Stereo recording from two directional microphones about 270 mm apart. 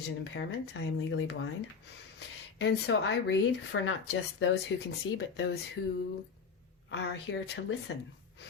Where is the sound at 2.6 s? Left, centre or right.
Left.